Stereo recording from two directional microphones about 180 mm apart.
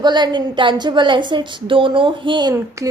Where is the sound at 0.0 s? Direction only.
25° right (ahead or behind).